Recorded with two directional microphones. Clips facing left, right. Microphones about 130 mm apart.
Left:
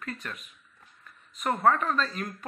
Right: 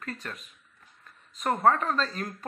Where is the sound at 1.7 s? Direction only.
35° right (ahead or behind).